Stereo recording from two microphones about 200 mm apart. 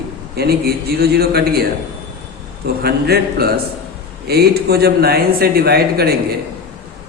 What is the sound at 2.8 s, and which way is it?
A man's voice, 50° right (ahead or behind).